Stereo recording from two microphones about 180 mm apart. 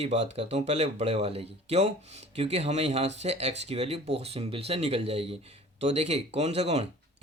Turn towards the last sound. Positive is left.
turn(degrees=-35)  # may be behind; listen again after turning